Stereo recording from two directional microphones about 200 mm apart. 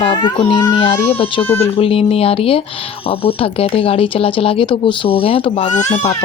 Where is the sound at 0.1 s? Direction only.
20° left (ahead or behind).